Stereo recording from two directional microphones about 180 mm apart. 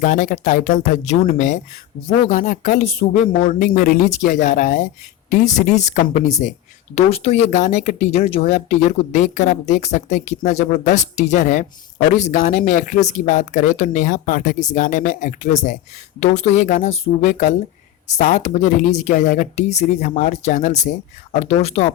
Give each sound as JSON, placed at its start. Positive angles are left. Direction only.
{"t": 0.0, "sound": "a woman's voice", "side_deg": 45}